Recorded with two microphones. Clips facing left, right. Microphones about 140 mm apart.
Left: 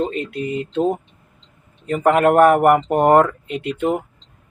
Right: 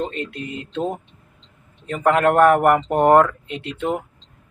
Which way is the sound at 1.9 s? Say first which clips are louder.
Left 2 dB; 10° left (ahead or behind).